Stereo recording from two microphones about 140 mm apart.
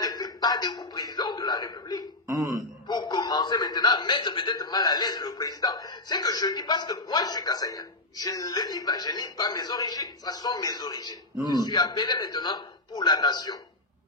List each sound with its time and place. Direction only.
0.0 s a man's voice: 30° left (ahead or behind)